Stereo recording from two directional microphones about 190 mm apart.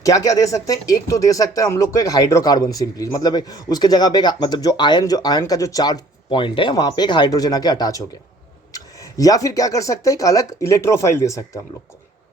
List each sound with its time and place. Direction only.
0.0 s speech: 15° left (ahead or behind)